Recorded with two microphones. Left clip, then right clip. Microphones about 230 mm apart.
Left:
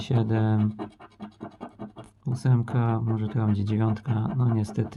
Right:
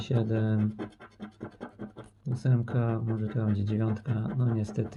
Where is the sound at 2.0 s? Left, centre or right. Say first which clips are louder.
Left 4 dB; left.